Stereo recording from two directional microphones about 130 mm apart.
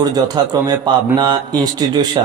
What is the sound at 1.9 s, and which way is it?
Speech, 30° right (ahead or behind).